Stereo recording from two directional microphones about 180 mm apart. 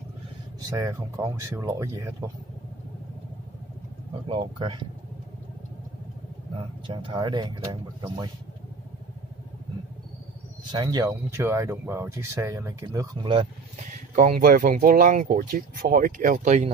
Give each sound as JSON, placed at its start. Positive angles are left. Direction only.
{"t": 0.7, "sound": "speech", "side_deg": -15}
{"t": 4.3, "sound": "speech", "side_deg": -30}
{"t": 6.9, "sound": "speech", "side_deg": -25}
{"t": 10.7, "sound": "speech", "side_deg": -25}
{"t": 14.1, "sound": "speech", "side_deg": -45}